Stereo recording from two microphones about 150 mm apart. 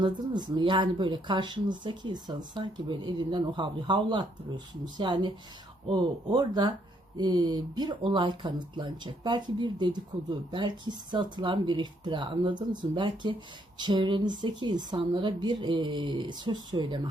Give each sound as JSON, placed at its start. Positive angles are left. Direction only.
{"t": 0.0, "sound": "speech", "side_deg": -30}